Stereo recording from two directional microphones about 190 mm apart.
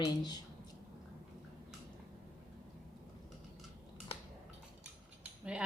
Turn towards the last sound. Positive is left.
turn(degrees=-5)  # may be behind; listen again after turning